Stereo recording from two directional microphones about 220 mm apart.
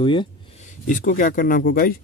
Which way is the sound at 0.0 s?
20° left (ahead or behind).